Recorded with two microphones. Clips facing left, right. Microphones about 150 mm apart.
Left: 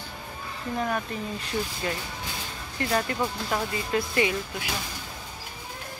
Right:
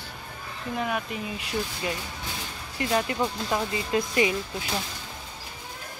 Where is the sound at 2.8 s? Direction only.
15° right (ahead or behind).